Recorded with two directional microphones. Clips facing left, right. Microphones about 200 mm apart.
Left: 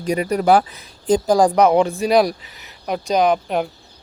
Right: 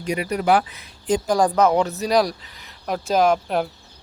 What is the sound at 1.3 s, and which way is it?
Speech, 15° left (ahead or behind).